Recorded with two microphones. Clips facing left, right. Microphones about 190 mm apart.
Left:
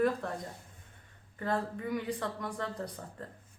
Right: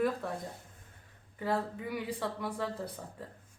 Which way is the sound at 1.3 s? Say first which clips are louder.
Even; 5° right (ahead or behind).